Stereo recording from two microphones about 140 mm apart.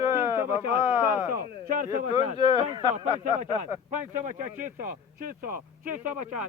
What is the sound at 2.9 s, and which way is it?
Speech, 65° right (ahead or behind).